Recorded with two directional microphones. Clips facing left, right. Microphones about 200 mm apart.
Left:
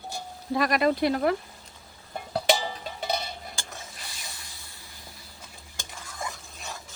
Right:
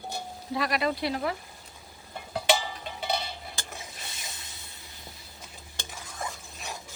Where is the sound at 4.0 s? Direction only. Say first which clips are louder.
Even; 20° right (ahead or behind).